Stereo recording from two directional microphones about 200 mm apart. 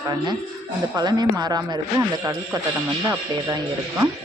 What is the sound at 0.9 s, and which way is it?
Speech, 20° right (ahead or behind).